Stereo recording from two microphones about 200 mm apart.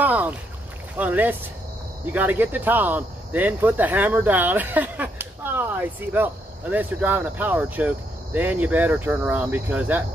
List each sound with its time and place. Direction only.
0.0 s boat: 10° right (ahead or behind)
0.9 s speech: 10° right (ahead or behind)